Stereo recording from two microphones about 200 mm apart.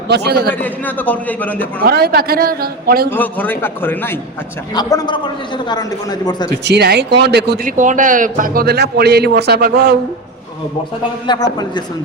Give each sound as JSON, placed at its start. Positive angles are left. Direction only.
{"t": 0.1, "sound": "a man's voice", "side_deg": -55}
{"t": 0.6, "sound": "a man's voice", "side_deg": 10}
{"t": 1.8, "sound": "a man's voice", "side_deg": -50}
{"t": 3.1, "sound": "a man's voice", "side_deg": 10}
{"t": 6.7, "sound": "speech", "side_deg": -55}
{"t": 7.8, "sound": "a man's voice", "side_deg": -40}
{"t": 11.3, "sound": "speech", "side_deg": 20}